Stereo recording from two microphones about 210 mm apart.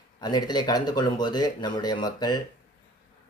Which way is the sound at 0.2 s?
20° left (ahead or behind).